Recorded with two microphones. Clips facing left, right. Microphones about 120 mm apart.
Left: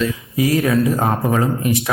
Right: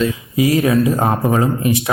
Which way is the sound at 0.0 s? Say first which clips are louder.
Right 3 dB; 20° right (ahead or behind).